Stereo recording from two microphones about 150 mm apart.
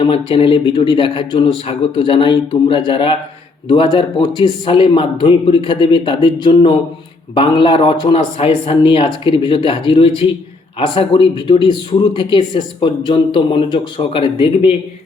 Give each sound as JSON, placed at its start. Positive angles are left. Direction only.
{"t": 0.0, "sound": "speech", "side_deg": 35}